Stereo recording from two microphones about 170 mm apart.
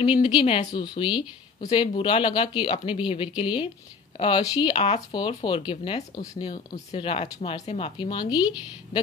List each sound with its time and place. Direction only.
0.0 s speech: 30° left (ahead or behind)